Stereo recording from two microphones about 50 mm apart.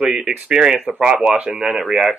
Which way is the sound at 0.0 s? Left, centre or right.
Centre.